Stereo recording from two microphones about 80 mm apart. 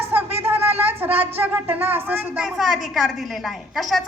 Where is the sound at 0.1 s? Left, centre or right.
Right.